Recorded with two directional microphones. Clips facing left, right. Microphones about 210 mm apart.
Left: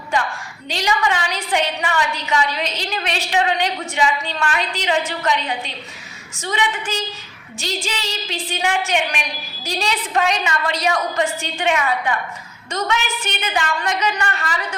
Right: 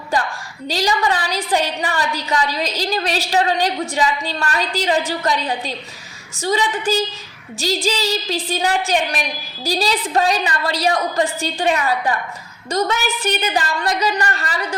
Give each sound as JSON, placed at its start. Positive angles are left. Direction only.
{"t": 0.7, "sound": "a woman's voice", "side_deg": -35}